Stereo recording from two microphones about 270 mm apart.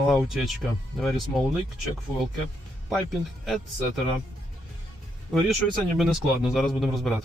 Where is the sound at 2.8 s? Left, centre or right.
Centre.